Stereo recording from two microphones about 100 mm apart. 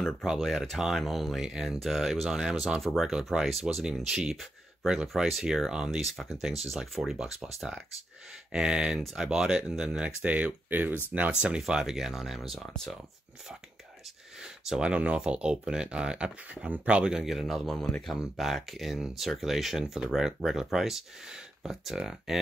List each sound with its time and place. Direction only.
0.0 s speech: centre (ahead or behind)
8.5 s speech: 10° right (ahead or behind)
14.4 s speech: 10° right (ahead or behind)